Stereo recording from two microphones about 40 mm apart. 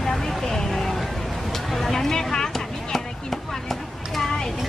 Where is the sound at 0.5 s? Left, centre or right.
Centre.